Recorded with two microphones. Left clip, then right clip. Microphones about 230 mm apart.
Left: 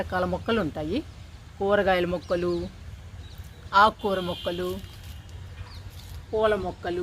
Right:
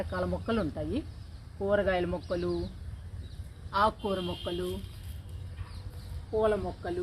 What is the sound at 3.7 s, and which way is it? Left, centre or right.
Speech, left.